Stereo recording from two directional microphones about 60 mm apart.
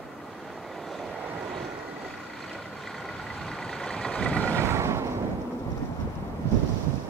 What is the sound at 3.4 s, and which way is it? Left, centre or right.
Vehicle, centre.